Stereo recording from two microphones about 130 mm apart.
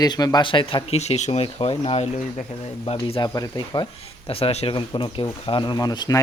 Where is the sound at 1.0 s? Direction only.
60° left (ahead or behind).